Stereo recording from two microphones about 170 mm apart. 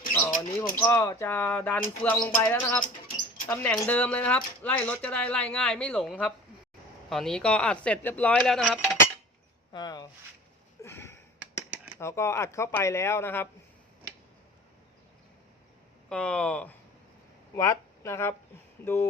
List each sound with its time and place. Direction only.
0.1 s speech: 10° left (ahead or behind)
9.7 s speech: 25° left (ahead or behind)
10.8 s a sound: 15° left (ahead or behind)
11.9 s speech: 15° left (ahead or behind)
16.0 s speech: 5° left (ahead or behind)
17.5 s speech: 20° left (ahead or behind)